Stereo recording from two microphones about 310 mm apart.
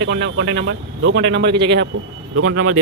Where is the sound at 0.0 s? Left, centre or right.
Right.